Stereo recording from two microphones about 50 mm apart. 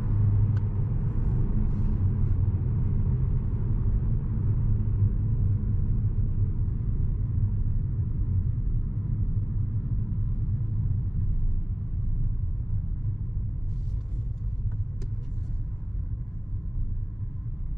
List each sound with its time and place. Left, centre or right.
0.0 s vehicle: centre